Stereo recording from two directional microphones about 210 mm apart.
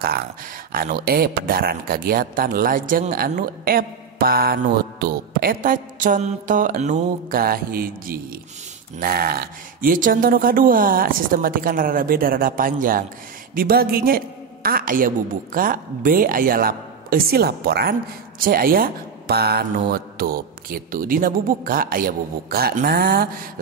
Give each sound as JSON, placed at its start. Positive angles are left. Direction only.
{"t": 0.7, "sound": "speech", "side_deg": -45}